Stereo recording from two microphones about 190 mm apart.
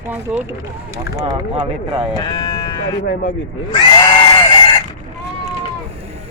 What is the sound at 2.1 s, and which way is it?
Speech, 25° left (ahead or behind).